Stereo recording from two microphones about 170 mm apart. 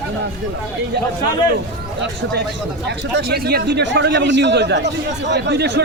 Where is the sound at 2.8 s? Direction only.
70° right (ahead or behind).